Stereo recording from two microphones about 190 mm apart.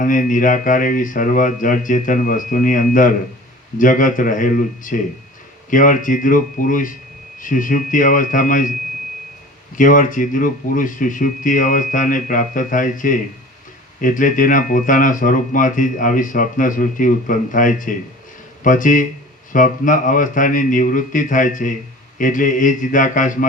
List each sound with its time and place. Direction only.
0.0 s speech: 45° left (ahead or behind)
9.7 s speech: 45° left (ahead or behind)